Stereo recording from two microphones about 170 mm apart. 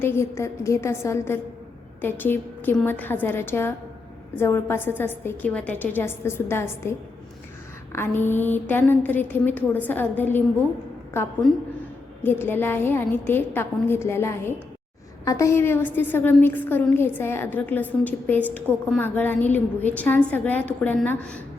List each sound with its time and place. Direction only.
0.0 s a woman's voice: 15° left (ahead or behind)
7.9 s a woman's voice: 10° left (ahead or behind)
11.4 s a woman's voice: centre (ahead or behind)
12.2 s a woman's voice: 10° left (ahead or behind)